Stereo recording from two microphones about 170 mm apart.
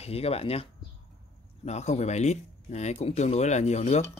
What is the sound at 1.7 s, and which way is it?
Speech, 40° left (ahead or behind).